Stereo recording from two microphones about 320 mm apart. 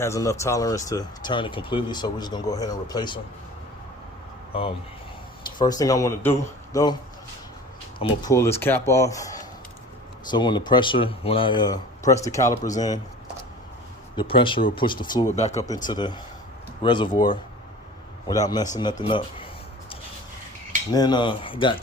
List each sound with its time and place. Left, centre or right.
0.0 s speech: centre
5.5 s speech: centre
8.2 s speech: centre
14.2 s speech: centre
20.9 s speech: centre